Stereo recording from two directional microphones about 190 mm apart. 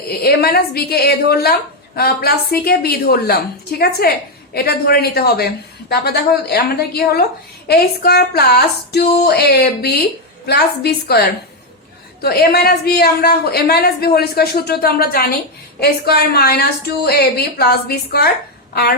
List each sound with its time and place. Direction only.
0.2 s a woman's voice: 55° left (ahead or behind)
12.2 s a woman's voice: 55° left (ahead or behind)